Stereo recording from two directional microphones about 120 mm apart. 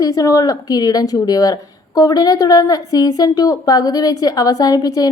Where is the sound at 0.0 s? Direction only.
30° left (ahead or behind).